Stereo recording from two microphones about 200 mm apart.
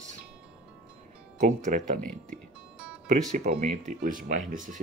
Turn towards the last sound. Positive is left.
turn(degrees=-40)  # may be behind; listen again after turning